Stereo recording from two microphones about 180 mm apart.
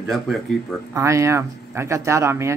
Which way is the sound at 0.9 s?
15° right (ahead or behind).